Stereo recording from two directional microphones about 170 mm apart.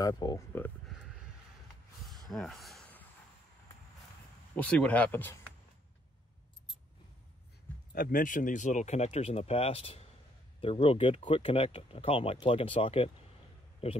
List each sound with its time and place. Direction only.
0.0 s speech: 25° left (ahead or behind)
2.2 s a sound: centre (ahead or behind)
4.6 s speech: 5° left (ahead or behind)
7.9 s speech: 55° left (ahead or behind); by 14.0 s 35° left (ahead or behind)